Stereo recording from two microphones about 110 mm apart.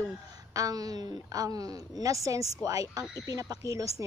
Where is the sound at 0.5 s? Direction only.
35° right (ahead or behind).